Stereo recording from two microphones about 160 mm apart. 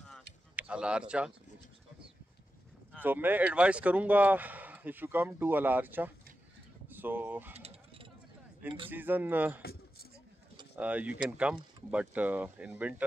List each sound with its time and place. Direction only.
0.6 s speech: 5° right (ahead or behind)
3.0 s speech: 10° right (ahead or behind)
7.5 s a sound: 40° right (ahead or behind)
8.6 s speech: 35° right (ahead or behind)
8.9 s speech: 10° right (ahead or behind)
9.6 s a sound: 75° left (ahead or behind)
10.8 s speech: 10° right (ahead or behind)